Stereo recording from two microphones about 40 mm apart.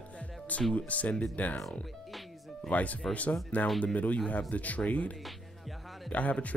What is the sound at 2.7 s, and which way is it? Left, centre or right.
Speech, left.